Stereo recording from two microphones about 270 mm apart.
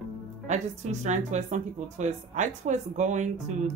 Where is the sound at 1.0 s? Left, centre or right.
Right.